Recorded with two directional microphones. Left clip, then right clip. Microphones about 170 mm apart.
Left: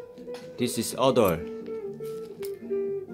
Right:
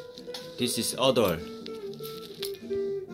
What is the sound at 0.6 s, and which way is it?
Speech, 20° left (ahead or behind).